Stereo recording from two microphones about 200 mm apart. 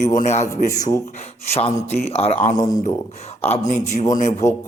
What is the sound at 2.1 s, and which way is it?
Speech, 30° left (ahead or behind).